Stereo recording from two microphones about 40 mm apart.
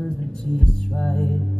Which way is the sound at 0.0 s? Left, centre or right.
Centre.